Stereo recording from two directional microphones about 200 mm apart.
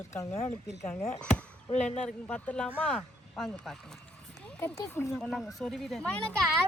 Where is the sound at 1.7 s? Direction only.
35° left (ahead or behind).